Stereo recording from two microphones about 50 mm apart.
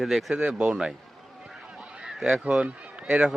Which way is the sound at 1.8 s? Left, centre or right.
Centre.